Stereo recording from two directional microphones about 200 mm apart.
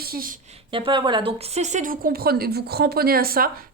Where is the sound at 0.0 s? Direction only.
45° right (ahead or behind).